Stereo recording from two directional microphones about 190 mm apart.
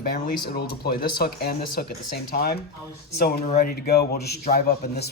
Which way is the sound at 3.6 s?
55° left (ahead or behind).